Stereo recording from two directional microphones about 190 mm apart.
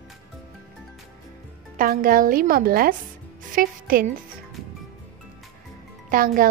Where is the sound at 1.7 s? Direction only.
50° right (ahead or behind).